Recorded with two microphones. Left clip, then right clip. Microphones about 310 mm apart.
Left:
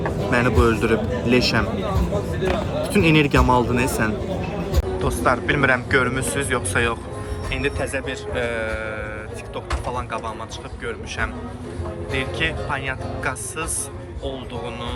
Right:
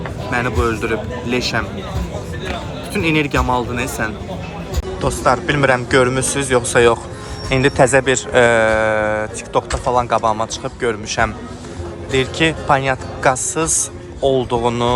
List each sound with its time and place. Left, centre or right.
0.3 s speech: centre
2.9 s speech: centre
5.0 s speech: centre